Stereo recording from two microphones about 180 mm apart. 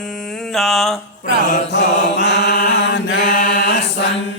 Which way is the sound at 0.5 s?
Centre (ahead or behind).